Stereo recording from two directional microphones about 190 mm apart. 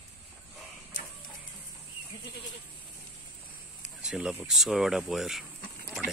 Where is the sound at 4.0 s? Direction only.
5° right (ahead or behind).